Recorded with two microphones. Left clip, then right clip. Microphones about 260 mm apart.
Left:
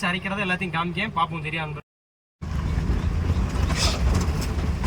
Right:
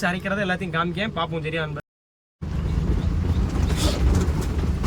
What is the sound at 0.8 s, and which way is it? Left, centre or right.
Speech, left.